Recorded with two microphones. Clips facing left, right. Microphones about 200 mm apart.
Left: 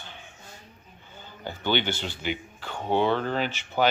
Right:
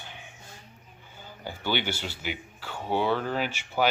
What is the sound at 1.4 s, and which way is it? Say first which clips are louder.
A man's voice: left 3 dB; 10° right (ahead or behind).